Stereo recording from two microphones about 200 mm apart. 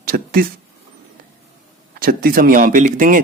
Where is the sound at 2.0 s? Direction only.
45° right (ahead or behind).